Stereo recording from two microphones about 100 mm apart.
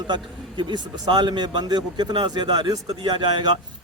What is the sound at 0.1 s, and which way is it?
A man's voice, 50° right (ahead or behind).